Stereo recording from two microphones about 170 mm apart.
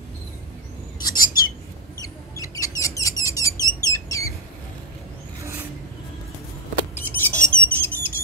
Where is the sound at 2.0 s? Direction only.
20° left (ahead or behind).